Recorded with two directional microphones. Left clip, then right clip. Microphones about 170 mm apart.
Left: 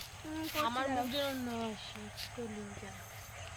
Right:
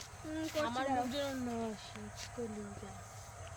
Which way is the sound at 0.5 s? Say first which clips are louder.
Left 1 dB; 10° right (ahead or behind).